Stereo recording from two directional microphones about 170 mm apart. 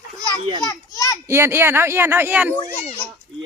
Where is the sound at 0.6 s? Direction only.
20° left (ahead or behind).